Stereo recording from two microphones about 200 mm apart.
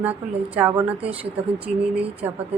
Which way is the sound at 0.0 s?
10° right (ahead or behind).